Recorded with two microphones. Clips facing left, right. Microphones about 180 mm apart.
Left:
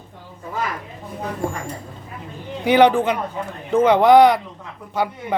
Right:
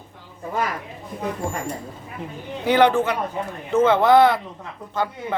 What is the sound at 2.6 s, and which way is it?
Speech, 15° left (ahead or behind).